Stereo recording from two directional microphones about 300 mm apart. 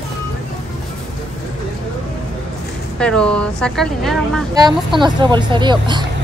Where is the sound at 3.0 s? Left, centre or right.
Centre.